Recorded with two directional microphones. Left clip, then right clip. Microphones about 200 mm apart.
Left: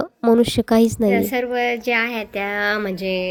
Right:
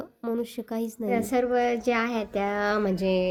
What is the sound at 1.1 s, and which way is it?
Speech, 5° right (ahead or behind).